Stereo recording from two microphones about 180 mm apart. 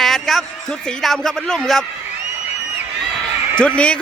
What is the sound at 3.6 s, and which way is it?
Speech, 5° left (ahead or behind).